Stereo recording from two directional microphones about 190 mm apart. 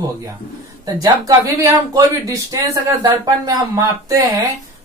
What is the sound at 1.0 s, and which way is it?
Speech, 20° right (ahead or behind).